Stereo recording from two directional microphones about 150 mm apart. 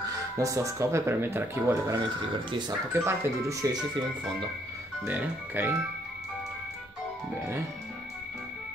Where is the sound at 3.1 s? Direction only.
20° right (ahead or behind).